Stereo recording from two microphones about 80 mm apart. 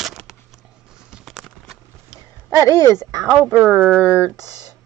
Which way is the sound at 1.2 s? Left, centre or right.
Centre.